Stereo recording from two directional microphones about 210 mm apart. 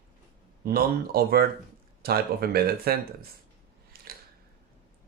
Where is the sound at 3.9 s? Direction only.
45° right (ahead or behind).